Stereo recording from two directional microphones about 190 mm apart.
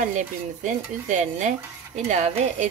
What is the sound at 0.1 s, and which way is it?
Speech, 40° right (ahead or behind).